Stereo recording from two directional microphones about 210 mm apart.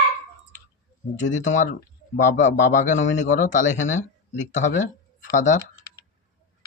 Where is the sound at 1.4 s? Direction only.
35° left (ahead or behind).